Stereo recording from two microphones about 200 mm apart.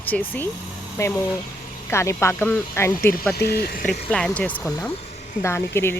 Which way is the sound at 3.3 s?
50° left (ahead or behind).